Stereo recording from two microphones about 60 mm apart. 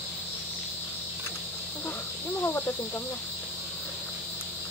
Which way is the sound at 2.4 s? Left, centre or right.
Left.